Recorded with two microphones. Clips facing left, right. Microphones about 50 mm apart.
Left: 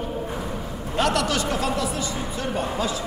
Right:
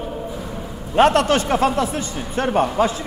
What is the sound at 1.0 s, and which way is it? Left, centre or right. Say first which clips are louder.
A man's voice: right 8 dB; right.